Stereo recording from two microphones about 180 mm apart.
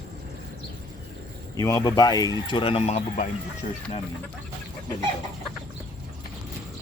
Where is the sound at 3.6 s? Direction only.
50° left (ahead or behind).